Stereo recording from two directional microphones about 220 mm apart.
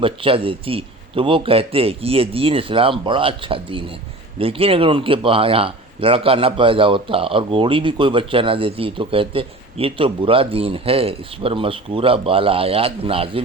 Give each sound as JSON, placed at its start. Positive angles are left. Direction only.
{"t": 0.0, "sound": "speech", "side_deg": -25}